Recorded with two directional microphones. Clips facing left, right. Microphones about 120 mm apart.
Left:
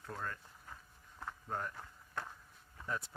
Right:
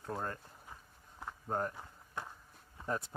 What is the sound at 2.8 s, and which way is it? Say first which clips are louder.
Speech: right 4 dB; 35° right (ahead or behind).